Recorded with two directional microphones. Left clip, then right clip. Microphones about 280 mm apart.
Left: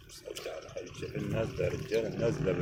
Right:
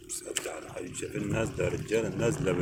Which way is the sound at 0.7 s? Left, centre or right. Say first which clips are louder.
Right 3 dB; right.